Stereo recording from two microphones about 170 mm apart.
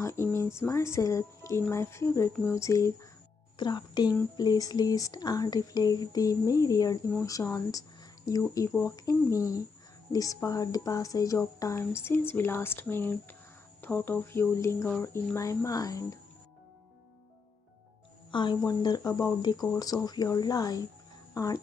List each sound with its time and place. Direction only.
0.0 s speech: 15° left (ahead or behind)
18.3 s speech: 25° left (ahead or behind)
21.3 s a sound: 20° left (ahead or behind)